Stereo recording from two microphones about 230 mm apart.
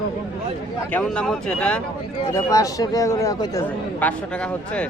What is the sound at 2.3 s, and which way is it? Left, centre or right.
Speech, centre.